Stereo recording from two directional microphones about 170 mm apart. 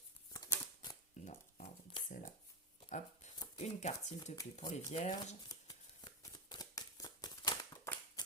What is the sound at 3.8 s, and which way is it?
Speech, 45° left (ahead or behind).